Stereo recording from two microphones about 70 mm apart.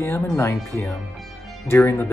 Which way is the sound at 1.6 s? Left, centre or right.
Left.